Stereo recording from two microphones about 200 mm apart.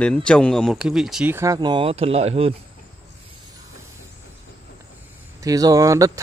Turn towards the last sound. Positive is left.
turn(degrees=-15)  # may be behind; listen again after turning